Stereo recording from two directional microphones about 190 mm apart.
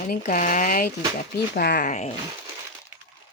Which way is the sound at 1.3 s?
60° left (ahead or behind).